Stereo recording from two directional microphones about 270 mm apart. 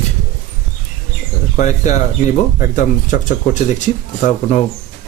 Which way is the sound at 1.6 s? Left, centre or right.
Left.